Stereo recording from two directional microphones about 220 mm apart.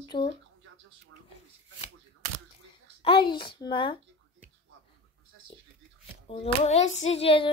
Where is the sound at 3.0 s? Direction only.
20° left (ahead or behind).